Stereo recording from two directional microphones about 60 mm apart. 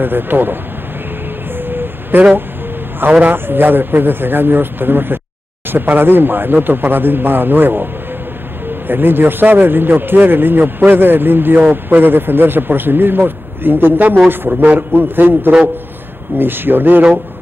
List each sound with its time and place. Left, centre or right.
0.0 s a man's voice: right
1.5 s vehicle: right
3.0 s a man's voice: right